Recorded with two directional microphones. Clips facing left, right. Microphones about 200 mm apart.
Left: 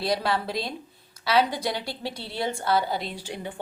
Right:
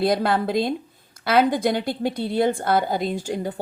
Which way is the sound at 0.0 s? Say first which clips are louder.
Right 6 dB; 50° right (ahead or behind).